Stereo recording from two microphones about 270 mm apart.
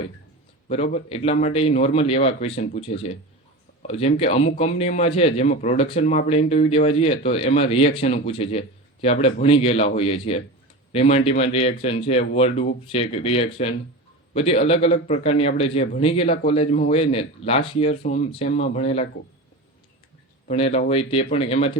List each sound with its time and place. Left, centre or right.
0.7 s speech: left
20.5 s speech: left